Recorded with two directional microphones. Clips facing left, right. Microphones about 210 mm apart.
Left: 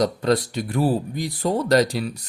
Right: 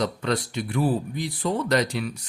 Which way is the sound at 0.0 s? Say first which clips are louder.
Left 5 dB; 40° left (ahead or behind).